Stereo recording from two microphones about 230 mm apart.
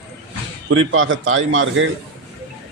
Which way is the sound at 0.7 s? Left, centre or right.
Right.